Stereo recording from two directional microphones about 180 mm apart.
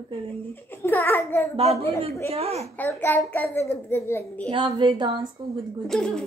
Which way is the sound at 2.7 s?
10° left (ahead or behind).